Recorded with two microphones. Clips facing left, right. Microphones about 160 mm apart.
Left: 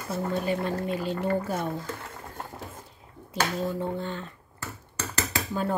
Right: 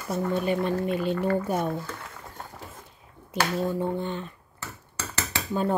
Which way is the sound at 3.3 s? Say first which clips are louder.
Right 2 dB; 15° right (ahead or behind).